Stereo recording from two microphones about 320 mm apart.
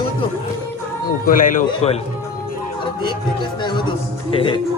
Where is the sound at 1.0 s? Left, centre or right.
Left.